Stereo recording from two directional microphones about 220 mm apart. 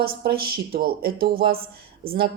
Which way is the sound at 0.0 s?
45° right (ahead or behind).